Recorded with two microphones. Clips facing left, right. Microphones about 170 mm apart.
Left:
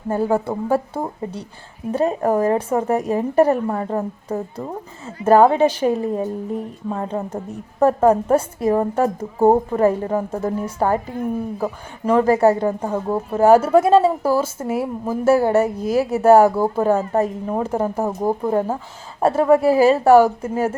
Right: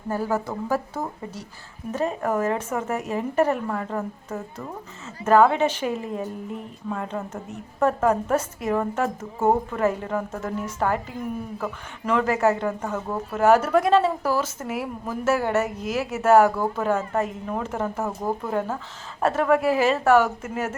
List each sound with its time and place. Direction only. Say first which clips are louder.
0.1 s speech: left 6 dB; 25° left (ahead or behind)